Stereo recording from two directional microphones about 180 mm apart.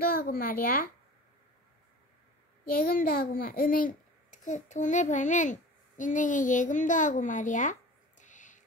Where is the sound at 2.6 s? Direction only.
55° left (ahead or behind).